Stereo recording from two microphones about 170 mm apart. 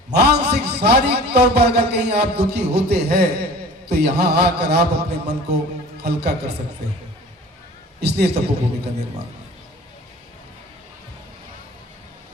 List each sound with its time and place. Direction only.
0.2 s a man's voice: 75° right (ahead or behind)
8.0 s a man's voice: 75° right (ahead or behind)